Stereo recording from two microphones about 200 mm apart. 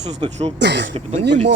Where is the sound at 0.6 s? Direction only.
55° right (ahead or behind).